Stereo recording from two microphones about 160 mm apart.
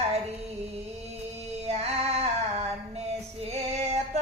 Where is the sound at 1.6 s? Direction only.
40° right (ahead or behind).